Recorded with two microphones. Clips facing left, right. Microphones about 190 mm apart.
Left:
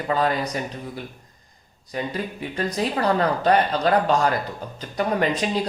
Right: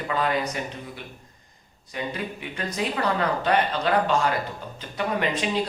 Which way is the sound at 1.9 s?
35° left (ahead or behind).